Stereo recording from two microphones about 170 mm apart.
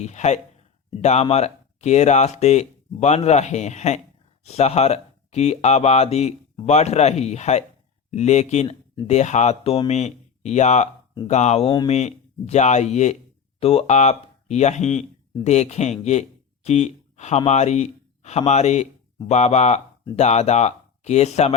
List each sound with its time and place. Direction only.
0.0 s speech: 40° left (ahead or behind)